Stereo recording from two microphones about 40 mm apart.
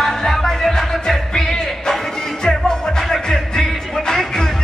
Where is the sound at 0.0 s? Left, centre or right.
Centre.